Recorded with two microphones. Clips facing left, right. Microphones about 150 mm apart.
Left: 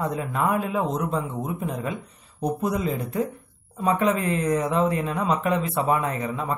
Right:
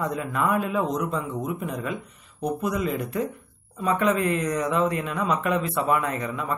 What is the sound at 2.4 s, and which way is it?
Speech, 35° left (ahead or behind).